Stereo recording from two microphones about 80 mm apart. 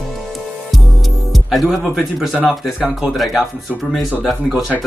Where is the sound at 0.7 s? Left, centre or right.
Centre.